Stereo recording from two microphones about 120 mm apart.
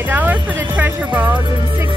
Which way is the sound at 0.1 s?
15° right (ahead or behind).